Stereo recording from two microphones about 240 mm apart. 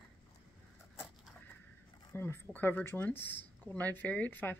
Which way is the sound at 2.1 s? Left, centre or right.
Centre.